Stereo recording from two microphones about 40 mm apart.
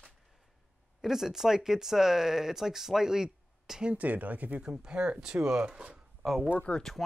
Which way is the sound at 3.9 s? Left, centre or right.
Right.